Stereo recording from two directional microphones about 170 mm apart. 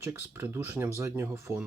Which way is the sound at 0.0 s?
10° right (ahead or behind).